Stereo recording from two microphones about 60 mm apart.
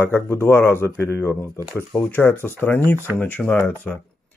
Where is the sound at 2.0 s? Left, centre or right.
Left.